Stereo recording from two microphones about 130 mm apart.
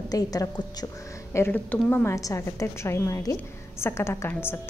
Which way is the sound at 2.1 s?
25° left (ahead or behind).